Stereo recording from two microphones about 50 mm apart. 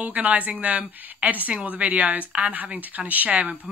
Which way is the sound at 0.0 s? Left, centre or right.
Right.